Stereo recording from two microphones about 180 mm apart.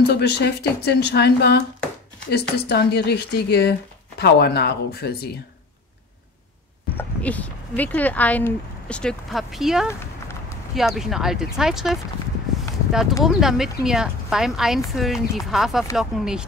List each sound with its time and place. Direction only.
0.0 s a woman's voice: 65° left (ahead or behind)
7.0 s speech: 10° left (ahead or behind)
13.2 s speech: centre (ahead or behind)